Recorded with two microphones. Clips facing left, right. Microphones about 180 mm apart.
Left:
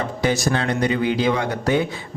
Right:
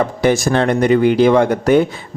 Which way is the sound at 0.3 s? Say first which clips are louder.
Right 6 dB; 60° right (ahead or behind).